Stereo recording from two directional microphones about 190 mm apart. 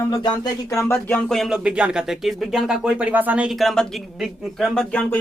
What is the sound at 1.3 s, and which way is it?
A woman's voice, centre (ahead or behind).